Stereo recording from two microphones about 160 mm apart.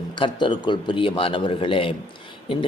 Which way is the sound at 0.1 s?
30° left (ahead or behind).